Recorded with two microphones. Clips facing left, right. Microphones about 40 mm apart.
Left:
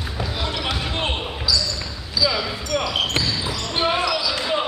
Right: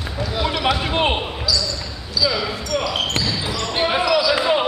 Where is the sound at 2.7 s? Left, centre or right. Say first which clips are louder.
Even; centre.